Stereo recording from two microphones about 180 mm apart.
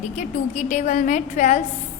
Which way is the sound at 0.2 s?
40° left (ahead or behind).